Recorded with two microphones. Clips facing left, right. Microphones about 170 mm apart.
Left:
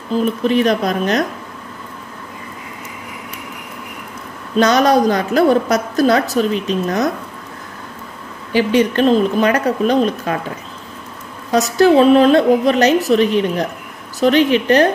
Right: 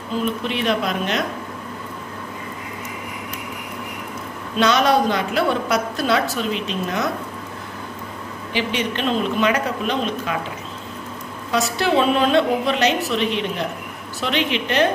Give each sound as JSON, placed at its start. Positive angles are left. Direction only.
{"t": 0.2, "sound": "a woman's voice", "side_deg": 40}
{"t": 4.6, "sound": "a woman's voice", "side_deg": 40}
{"t": 8.5, "sound": "a woman's voice", "side_deg": 45}
{"t": 11.5, "sound": "a woman's voice", "side_deg": 40}